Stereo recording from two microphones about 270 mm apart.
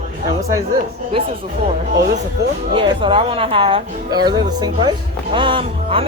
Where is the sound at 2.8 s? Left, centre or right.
Centre.